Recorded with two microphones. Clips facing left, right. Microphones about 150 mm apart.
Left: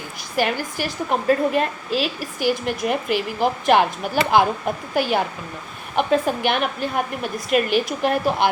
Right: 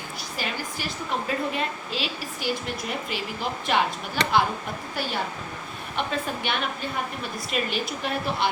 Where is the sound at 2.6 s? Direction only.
60° left (ahead or behind).